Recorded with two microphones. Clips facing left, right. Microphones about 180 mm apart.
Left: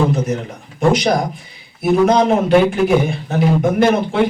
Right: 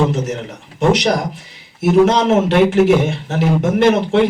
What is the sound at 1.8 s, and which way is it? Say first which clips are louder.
A man's voice: right 1 dB; 80° right.